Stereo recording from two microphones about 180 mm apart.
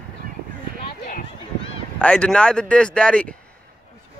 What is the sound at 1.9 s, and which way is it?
Speech, 5° left (ahead or behind).